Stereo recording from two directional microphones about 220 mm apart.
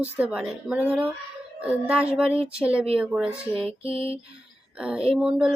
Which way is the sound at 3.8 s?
25° right (ahead or behind).